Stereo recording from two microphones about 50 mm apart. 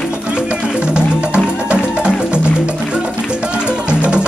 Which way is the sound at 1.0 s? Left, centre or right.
Right.